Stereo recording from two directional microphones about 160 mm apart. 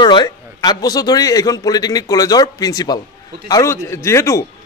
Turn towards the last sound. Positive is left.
turn(degrees=20)  # may be behind; listen again after turning